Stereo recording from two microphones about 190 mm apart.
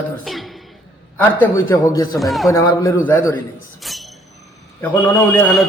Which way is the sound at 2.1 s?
Centre (ahead or behind).